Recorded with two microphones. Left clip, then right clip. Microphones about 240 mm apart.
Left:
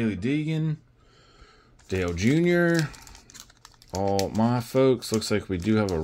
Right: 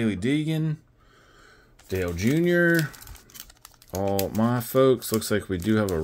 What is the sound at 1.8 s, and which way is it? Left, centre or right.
Speech, centre.